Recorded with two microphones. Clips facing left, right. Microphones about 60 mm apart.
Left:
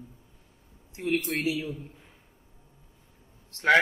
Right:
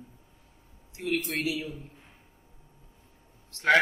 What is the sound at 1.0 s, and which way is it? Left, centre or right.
Speech, left.